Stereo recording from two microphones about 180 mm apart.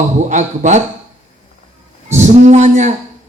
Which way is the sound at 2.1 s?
40° right (ahead or behind).